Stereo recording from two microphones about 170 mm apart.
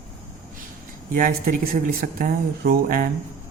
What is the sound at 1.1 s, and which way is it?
Speech, 55° right (ahead or behind).